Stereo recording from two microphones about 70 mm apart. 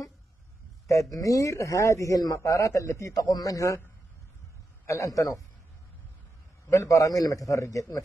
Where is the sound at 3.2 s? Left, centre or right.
Left.